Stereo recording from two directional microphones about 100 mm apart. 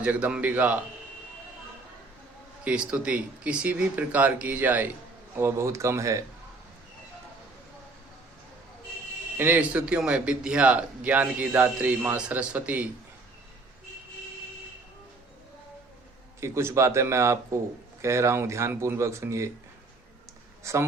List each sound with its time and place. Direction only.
0.0 s a man's voice: 15° right (ahead or behind)
2.6 s a man's voice: 15° right (ahead or behind); by 6.2 s 30° right (ahead or behind)
9.4 s a man's voice: 15° right (ahead or behind)
16.4 s speech: 30° right (ahead or behind)
20.7 s speech: 30° right (ahead or behind)